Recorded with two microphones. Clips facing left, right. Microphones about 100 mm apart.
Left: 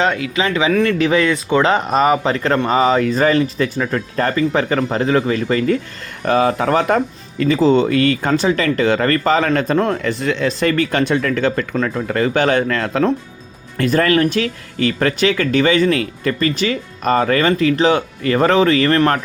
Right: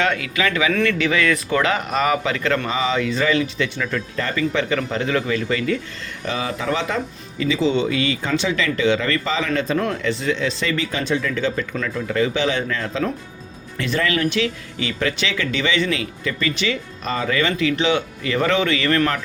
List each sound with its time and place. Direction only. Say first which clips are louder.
0.0 s speech: left 3 dB; 25° left (ahead or behind)
0.9 s speech: left 4 dB; 40° left (ahead or behind)
6.2 s speech: left 9 dB; 55° left (ahead or behind)
13.7 s speech: left 7 dB; 45° left (ahead or behind)